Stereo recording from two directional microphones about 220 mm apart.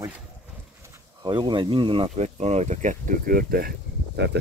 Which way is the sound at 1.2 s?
20° right (ahead or behind).